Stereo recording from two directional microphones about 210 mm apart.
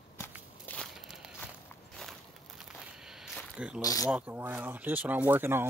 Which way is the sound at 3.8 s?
15° left (ahead or behind).